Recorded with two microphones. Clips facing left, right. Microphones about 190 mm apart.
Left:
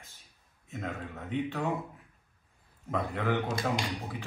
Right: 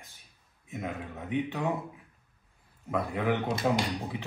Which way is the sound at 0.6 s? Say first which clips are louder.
Right 1 dB; 15° right (ahead or behind).